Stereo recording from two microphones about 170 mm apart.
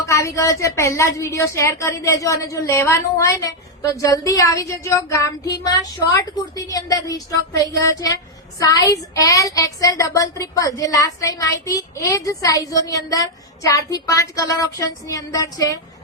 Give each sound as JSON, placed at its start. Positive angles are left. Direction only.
{"t": 0.0, "sound": "a woman's voice", "side_deg": 20}